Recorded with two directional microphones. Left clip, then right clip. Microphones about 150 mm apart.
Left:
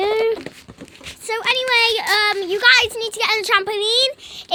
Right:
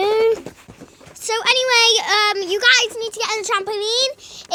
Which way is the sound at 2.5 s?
30° left (ahead or behind).